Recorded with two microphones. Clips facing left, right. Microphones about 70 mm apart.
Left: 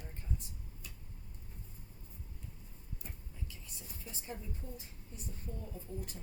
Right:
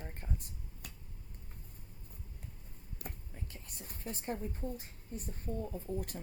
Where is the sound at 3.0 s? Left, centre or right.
Right.